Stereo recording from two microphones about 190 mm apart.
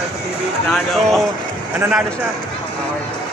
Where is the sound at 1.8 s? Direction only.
5° right (ahead or behind).